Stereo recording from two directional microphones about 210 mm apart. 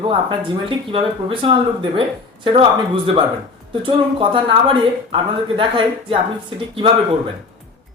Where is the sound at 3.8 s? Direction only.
25° right (ahead or behind).